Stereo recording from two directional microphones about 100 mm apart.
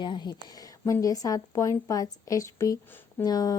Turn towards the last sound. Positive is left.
turn(degrees=40)  # may be behind; listen again after turning